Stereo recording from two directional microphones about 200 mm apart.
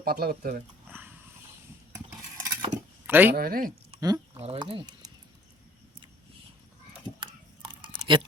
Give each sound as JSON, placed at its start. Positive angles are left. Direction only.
{"t": 0.0, "sound": "speech", "side_deg": -50}
{"t": 0.9, "sound": "a sound", "side_deg": -10}
{"t": 2.4, "sound": "keys jangling", "side_deg": -20}
{"t": 3.3, "sound": "speech", "side_deg": -45}
{"t": 4.0, "sound": "speech", "side_deg": -20}
{"t": 4.4, "sound": "speech", "side_deg": -30}
{"t": 7.2, "sound": "a sound", "side_deg": -25}